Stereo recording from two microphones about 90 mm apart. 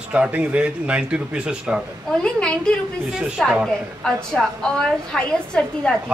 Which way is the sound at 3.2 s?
5° right (ahead or behind).